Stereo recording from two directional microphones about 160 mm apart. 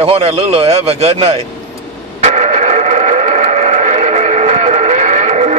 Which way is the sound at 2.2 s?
45° right (ahead or behind).